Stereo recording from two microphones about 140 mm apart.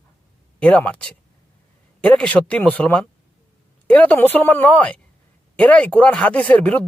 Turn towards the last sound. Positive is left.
turn(degrees=10)  # may be behind; listen again after turning